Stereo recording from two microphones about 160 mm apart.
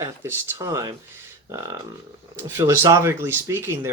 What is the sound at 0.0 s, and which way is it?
Speech, 15° right (ahead or behind).